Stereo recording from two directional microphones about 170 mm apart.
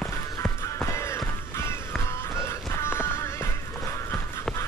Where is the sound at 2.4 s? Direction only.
15° left (ahead or behind).